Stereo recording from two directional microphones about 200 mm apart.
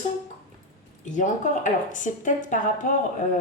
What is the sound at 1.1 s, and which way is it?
A woman's voice, 35° left (ahead or behind).